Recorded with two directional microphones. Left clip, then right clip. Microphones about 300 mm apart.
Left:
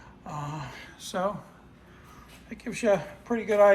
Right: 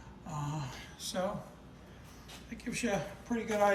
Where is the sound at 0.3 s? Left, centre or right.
Centre.